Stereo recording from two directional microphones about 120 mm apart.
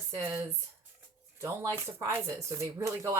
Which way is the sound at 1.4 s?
20° right (ahead or behind).